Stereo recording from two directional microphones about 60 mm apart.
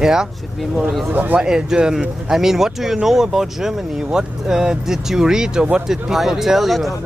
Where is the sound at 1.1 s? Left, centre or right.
Right.